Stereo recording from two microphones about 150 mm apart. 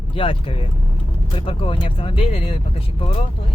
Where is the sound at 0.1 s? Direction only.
35° left (ahead or behind).